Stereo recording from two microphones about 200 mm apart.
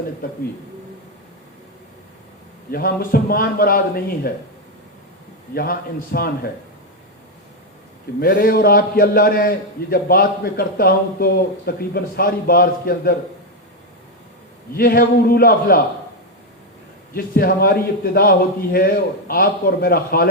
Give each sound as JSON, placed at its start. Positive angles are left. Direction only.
{"t": 0.2, "sound": "a man's voice", "side_deg": 45}
{"t": 2.7, "sound": "a man's voice", "side_deg": 45}
{"t": 5.5, "sound": "a man's voice", "side_deg": 50}
{"t": 8.2, "sound": "a man's voice", "side_deg": 45}
{"t": 14.8, "sound": "a man's voice", "side_deg": 50}
{"t": 17.2, "sound": "a man's voice", "side_deg": 50}